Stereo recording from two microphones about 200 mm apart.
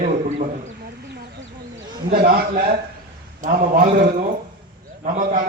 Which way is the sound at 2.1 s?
50° right (ahead or behind).